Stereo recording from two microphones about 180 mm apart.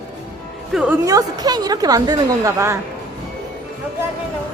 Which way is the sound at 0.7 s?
5° right (ahead or behind).